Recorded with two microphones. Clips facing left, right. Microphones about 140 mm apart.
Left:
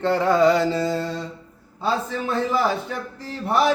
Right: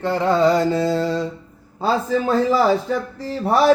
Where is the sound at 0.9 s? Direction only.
90° right.